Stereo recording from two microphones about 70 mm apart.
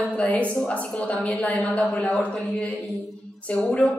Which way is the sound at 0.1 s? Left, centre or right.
Centre.